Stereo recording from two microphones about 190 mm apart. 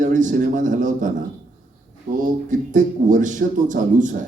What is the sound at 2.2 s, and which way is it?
A man's voice, 45° right (ahead or behind).